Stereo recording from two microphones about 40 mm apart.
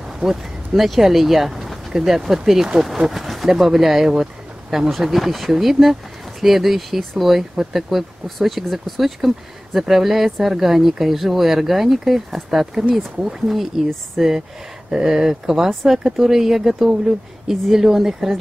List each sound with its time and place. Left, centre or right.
0.2 s speech: centre